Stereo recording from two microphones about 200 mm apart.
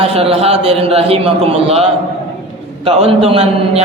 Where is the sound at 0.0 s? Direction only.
30° right (ahead or behind).